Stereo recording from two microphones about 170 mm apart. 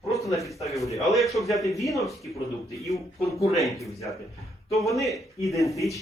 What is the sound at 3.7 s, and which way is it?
Speech, 20° left (ahead or behind).